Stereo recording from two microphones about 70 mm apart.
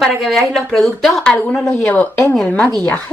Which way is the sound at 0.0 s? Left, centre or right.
Centre.